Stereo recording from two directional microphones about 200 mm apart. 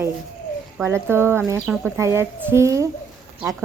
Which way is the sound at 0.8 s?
15° right (ahead or behind).